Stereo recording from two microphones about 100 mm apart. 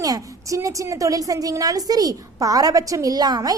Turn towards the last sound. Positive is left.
turn(degrees=-40)  # may be behind; listen again after turning